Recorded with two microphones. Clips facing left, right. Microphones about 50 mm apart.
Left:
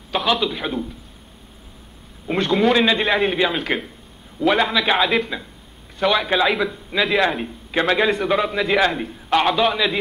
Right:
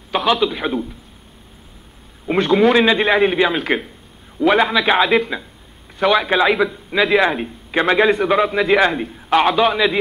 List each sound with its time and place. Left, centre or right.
0.1 s a man's voice: centre
2.3 s a man's voice: right
5.9 s a man's voice: right
6.3 s a man's voice: centre
8.0 s a man's voice: right